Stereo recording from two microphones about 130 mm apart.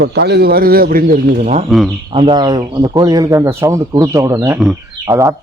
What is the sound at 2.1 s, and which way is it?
Speech, 40° right (ahead or behind).